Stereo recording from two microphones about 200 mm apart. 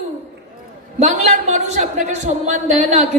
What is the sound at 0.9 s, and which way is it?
A man's voice, 35° right (ahead or behind).